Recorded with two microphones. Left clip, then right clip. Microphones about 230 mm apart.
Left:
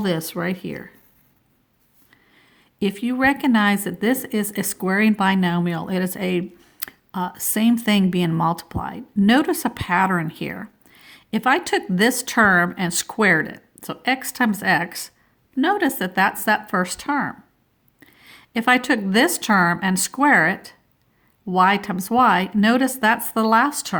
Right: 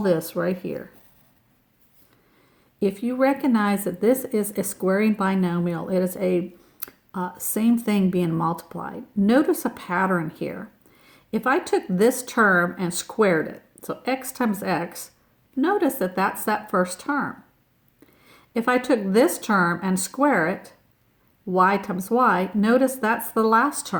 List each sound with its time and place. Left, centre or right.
0.0 s a woman's voice: left
2.8 s a woman's voice: left